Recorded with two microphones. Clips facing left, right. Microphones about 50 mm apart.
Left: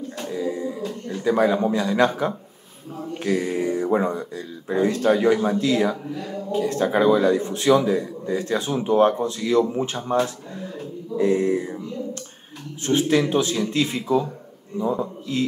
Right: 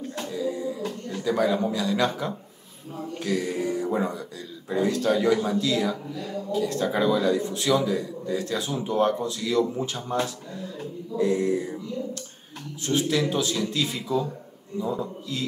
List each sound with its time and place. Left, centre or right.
0.2 s a sound: left
1.2 s speech: left
12.8 s speech: left